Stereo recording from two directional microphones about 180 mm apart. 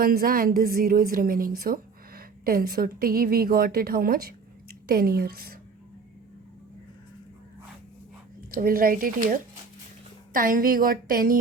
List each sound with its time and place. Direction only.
0.0 s a woman's voice: 55° right (ahead or behind)
8.4 s a woman's voice: 55° right (ahead or behind)